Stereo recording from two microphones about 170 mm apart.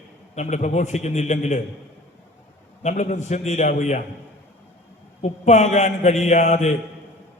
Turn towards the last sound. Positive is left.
turn(degrees=40)  # may be behind; listen again after turning